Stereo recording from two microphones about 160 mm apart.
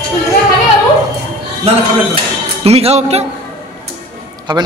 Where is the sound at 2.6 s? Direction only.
40° right (ahead or behind).